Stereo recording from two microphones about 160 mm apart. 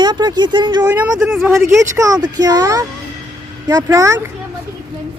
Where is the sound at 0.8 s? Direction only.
10° right (ahead or behind).